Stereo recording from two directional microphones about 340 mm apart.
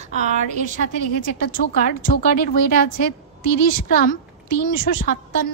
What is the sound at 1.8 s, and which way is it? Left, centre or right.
Speech, left.